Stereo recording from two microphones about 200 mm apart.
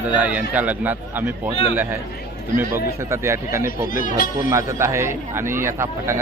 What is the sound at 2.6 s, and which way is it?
A man's voice, 15° right (ahead or behind).